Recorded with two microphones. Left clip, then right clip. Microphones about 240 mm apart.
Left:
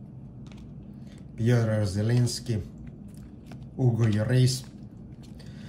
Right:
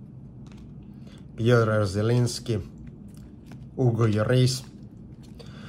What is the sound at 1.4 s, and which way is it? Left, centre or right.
Speech, centre.